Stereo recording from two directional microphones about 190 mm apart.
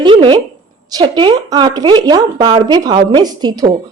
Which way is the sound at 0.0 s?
25° right (ahead or behind).